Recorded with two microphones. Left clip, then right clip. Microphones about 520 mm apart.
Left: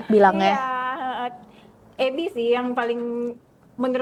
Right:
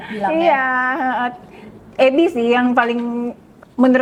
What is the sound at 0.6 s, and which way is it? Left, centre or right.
A woman's voice, right.